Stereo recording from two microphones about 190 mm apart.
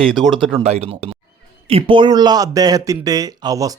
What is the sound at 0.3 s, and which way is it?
Speech, 35° right (ahead or behind).